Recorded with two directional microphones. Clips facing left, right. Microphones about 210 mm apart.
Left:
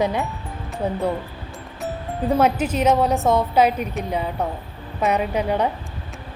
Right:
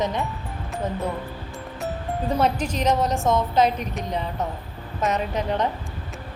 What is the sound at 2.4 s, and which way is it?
A woman's voice, 5° left (ahead or behind).